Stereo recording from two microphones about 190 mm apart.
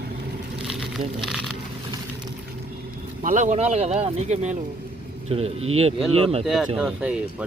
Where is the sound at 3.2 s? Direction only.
45° right (ahead or behind).